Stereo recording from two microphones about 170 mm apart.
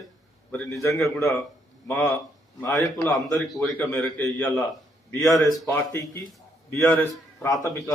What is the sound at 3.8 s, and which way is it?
A man's voice, 10° left (ahead or behind).